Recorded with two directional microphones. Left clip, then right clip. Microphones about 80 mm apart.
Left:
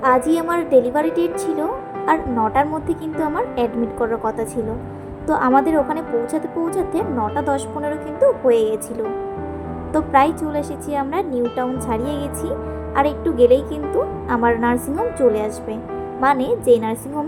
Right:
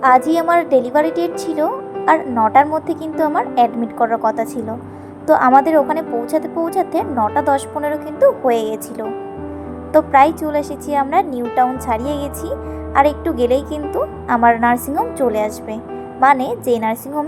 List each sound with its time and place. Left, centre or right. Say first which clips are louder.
0.0 s a woman's voice: right 4 dB; right
9.9 s a woman's voice: right 5 dB; right